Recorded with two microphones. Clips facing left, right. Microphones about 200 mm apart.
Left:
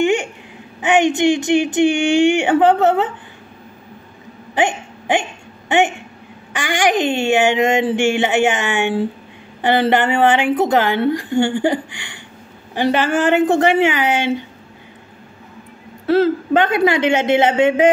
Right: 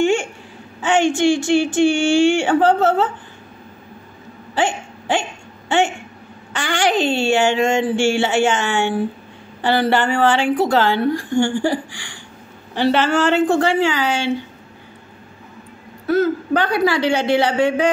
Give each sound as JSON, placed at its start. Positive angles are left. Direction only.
{"t": 0.0, "sound": "babbling", "side_deg": 20}
{"t": 0.7, "sound": "a woman's voice", "side_deg": 15}
{"t": 4.6, "sound": "a woman's voice", "side_deg": 20}
{"t": 16.1, "sound": "a woman's voice", "side_deg": 25}